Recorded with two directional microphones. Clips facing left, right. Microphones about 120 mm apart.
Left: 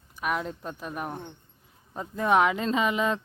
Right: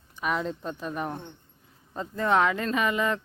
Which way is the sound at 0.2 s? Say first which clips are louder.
Right 1 dB; 5° left (ahead or behind).